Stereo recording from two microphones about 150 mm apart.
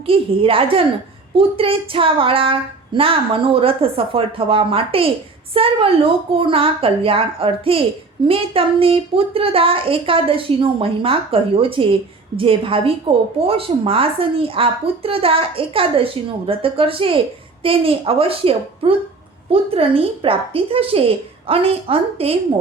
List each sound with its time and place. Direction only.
0.0 s a woman's voice: 35° right (ahead or behind)